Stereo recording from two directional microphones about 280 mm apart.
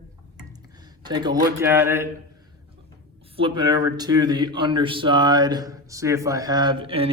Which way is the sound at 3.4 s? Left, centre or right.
Centre.